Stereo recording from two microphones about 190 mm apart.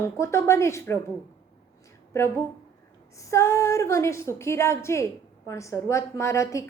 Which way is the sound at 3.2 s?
15° left (ahead or behind).